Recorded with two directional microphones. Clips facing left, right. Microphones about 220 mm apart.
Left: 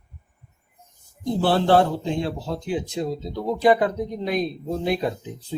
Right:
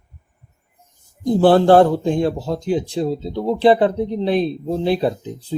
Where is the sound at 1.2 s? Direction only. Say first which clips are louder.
Right 8 dB; 50° right (ahead or behind).